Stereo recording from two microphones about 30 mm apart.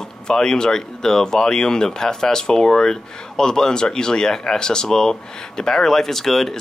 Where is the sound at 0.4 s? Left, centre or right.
Left.